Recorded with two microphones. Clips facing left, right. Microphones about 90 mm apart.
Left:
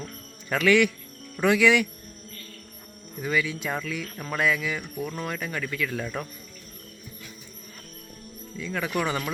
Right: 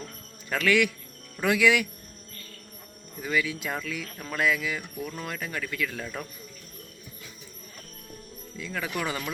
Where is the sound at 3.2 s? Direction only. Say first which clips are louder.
Left 1 dB; centre (ahead or behind).